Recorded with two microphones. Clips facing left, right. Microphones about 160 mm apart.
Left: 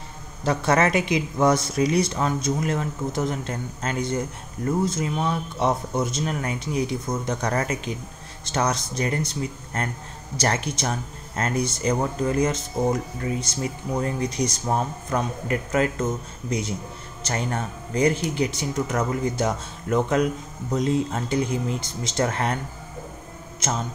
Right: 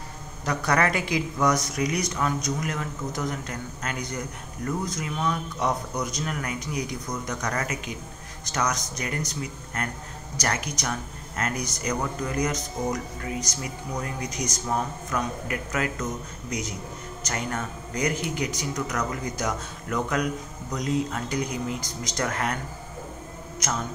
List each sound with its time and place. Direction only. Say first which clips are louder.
0.5 s speech: left 4 dB; 25° left (ahead or behind)
23.6 s speech: left 3 dB; 25° left (ahead or behind)